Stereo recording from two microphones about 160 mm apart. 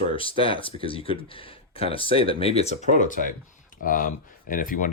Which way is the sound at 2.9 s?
55° left (ahead or behind).